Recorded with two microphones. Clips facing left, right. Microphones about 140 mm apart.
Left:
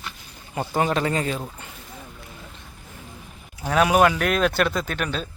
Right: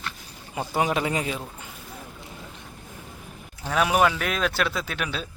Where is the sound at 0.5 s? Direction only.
10° right (ahead or behind).